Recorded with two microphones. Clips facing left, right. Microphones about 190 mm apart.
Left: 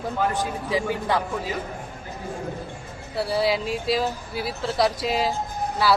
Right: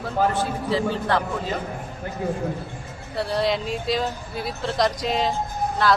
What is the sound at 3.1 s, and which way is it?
Speech, 5° left (ahead or behind).